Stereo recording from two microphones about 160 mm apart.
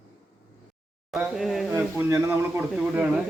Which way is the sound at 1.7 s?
15° right (ahead or behind).